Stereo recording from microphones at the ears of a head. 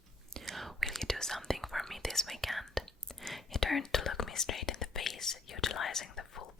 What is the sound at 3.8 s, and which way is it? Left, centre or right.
Whispering, left.